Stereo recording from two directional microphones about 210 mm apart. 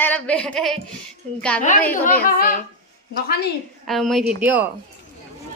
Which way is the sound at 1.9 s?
40° left (ahead or behind).